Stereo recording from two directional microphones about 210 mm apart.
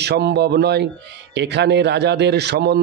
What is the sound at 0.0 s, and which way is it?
Speech, 50° right (ahead or behind).